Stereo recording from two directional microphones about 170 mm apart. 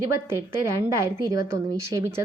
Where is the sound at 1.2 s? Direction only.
15° right (ahead or behind).